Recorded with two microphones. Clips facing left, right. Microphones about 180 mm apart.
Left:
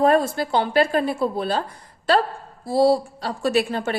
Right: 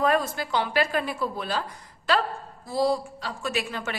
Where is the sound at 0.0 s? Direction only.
30° left (ahead or behind).